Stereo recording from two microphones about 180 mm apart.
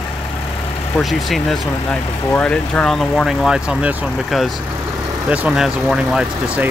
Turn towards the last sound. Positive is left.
turn(degrees=-5)  # may be behind; listen again after turning